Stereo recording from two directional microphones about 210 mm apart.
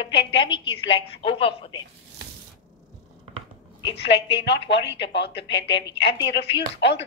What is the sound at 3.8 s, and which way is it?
A woman's voice, 55° left (ahead or behind).